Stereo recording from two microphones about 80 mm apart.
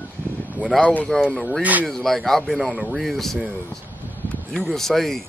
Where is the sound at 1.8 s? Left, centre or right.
Centre.